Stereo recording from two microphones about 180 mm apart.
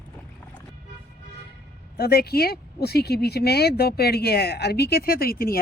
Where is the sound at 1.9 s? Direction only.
60° left (ahead or behind).